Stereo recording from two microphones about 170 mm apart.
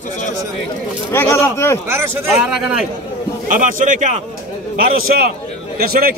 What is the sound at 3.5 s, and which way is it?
Speech, 50° right (ahead or behind).